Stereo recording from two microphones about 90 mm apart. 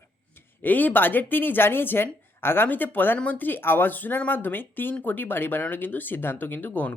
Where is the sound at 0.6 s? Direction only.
20° left (ahead or behind).